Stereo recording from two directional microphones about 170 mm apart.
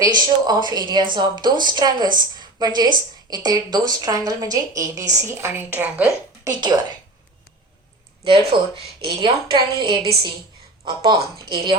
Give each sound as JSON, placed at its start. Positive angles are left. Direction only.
{"t": 0.2, "sound": "a woman's voice", "side_deg": -25}
{"t": 8.5, "sound": "a woman's voice", "side_deg": -30}